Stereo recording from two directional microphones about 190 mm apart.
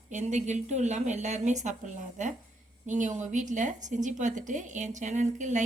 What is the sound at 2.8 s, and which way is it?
Speech, 40° right (ahead or behind).